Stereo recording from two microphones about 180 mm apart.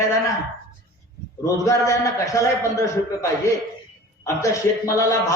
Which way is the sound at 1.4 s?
20° left (ahead or behind).